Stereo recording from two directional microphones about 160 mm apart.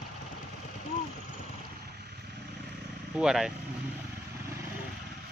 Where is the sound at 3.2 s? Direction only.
5° right (ahead or behind).